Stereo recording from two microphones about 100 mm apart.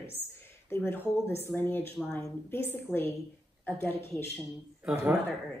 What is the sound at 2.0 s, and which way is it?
Speech, 5° left (ahead or behind).